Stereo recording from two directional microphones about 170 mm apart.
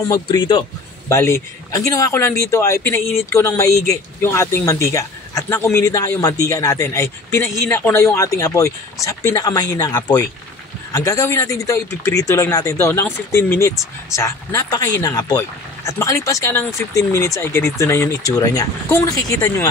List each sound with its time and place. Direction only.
0.1 s speech: 25° left (ahead or behind)
1.0 s speech: 15° left (ahead or behind)